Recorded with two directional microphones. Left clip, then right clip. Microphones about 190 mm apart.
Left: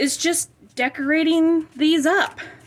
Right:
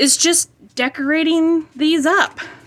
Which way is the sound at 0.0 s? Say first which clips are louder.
Right 6 dB; 20° right (ahead or behind).